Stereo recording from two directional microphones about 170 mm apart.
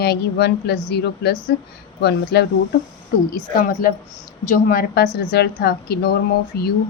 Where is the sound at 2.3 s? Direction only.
75° left (ahead or behind).